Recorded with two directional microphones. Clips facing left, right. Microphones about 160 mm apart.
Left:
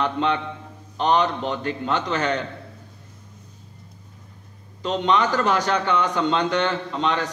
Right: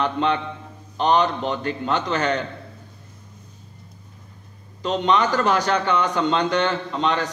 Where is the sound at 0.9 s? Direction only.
35° right (ahead or behind).